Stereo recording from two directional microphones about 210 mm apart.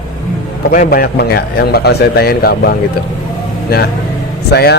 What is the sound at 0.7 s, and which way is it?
A man's voice, 45° left (ahead or behind).